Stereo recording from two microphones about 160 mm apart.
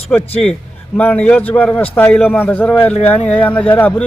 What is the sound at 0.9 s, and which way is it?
A man's voice, 10° left (ahead or behind).